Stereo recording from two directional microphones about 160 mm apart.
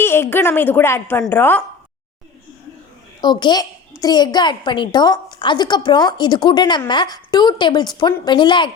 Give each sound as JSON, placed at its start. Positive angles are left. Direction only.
{"t": 0.0, "sound": "a woman's voice", "side_deg": 15}
{"t": 3.2, "sound": "a woman's voice", "side_deg": 25}